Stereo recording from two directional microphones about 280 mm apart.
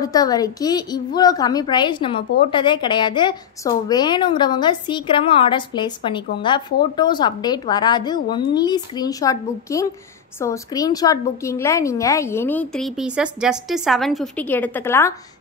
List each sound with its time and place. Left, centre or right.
0.0 s a woman's voice: centre